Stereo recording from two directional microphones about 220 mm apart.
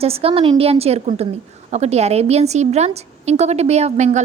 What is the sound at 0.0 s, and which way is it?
A woman's voice, 25° right (ahead or behind).